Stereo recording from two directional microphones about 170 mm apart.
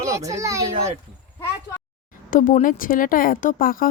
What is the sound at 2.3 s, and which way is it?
Speech, 50° left (ahead or behind).